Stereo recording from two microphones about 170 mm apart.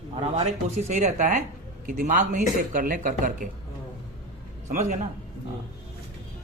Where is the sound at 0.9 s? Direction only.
45° right (ahead or behind).